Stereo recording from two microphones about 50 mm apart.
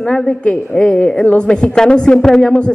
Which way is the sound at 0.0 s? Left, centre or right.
Centre.